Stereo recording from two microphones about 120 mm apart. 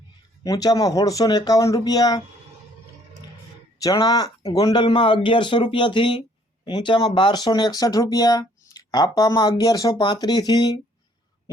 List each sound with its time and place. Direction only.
0.4 s speech: 30° left (ahead or behind)
3.8 s speech: 30° left (ahead or behind)